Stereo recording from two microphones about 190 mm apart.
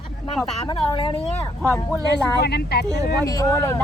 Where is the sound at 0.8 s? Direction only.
25° left (ahead or behind).